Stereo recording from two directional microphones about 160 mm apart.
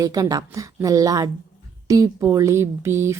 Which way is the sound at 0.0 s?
20° right (ahead or behind).